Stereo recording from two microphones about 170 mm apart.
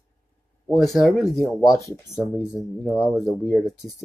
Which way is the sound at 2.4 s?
5° right (ahead or behind).